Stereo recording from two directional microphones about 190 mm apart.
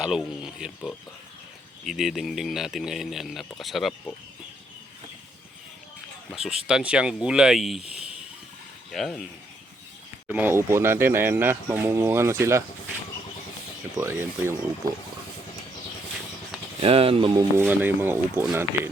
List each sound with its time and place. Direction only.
0.0 s speech: 5° right (ahead or behind)
6.3 s speech: centre (ahead or behind)
8.9 s speech: centre (ahead or behind)
10.2 s speech: 10° right (ahead or behind)
13.9 s speech: 15° right (ahead or behind)
16.8 s speech: 30° right (ahead or behind)
17.6 s speech: 10° right (ahead or behind)